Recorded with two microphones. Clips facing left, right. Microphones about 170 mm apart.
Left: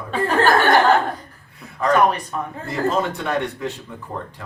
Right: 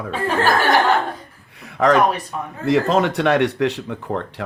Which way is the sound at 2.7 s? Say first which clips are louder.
Right 6 dB; 75° right (ahead or behind).